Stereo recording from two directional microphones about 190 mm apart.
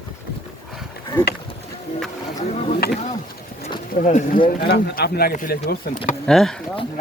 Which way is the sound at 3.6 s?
35° left (ahead or behind).